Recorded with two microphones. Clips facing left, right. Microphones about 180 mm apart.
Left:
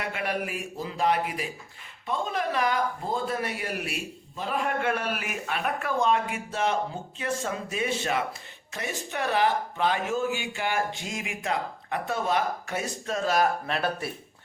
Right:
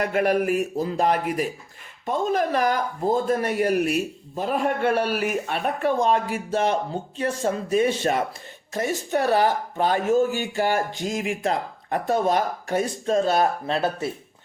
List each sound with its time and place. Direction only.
0.0 s speech: 45° right (ahead or behind); by 14.1 s 25° right (ahead or behind)